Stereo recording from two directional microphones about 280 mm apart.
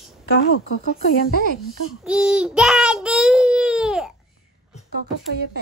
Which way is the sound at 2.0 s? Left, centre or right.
Centre.